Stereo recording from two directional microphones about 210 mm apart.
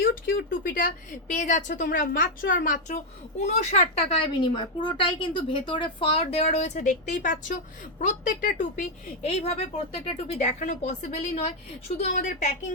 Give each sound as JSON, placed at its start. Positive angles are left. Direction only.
{"t": 0.0, "sound": "a woman's voice", "side_deg": 45}
{"t": 9.3, "sound": "a woman's voice", "side_deg": 30}